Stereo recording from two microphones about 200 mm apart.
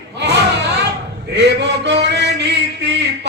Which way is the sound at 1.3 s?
60° right (ahead or behind).